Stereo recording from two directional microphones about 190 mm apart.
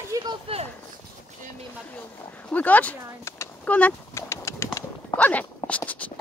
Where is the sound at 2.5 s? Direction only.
10° left (ahead or behind).